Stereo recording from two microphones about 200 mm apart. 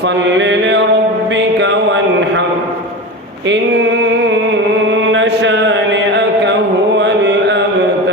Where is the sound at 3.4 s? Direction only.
65° right (ahead or behind).